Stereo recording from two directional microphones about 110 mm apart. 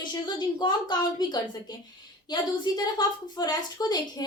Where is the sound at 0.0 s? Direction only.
45° left (ahead or behind).